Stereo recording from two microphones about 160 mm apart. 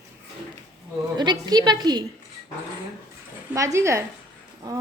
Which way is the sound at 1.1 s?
25° right (ahead or behind).